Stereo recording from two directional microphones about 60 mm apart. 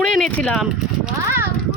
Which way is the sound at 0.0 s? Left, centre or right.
Centre.